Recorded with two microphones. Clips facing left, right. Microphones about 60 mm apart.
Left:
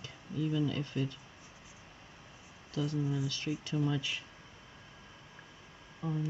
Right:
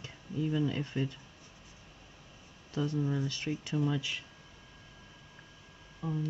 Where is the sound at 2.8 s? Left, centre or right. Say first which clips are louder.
Right 2 dB; right.